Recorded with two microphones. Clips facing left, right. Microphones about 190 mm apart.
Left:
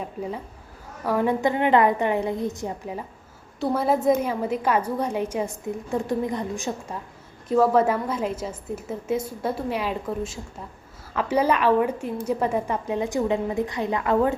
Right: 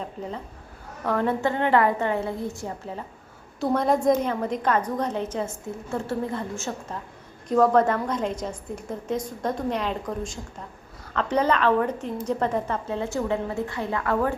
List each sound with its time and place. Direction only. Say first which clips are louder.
0.0 s a woman's voice: left 2 dB; 10° left (ahead or behind)
3.6 s a woman's voice: even; 5° left (ahead or behind)